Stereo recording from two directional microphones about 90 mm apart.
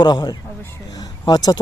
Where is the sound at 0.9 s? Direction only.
50° left (ahead or behind).